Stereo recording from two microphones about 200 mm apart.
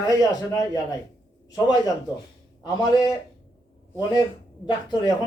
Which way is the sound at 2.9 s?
20° left (ahead or behind).